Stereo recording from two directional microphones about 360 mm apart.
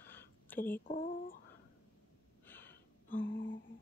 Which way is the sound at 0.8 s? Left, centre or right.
Left.